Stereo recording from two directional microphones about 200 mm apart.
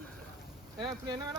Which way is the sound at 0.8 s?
20° right (ahead or behind).